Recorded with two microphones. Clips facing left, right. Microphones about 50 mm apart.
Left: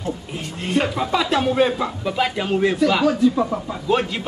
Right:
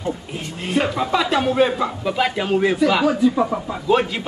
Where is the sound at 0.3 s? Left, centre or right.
Centre.